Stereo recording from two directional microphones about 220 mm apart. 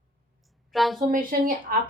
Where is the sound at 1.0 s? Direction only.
40° right (ahead or behind).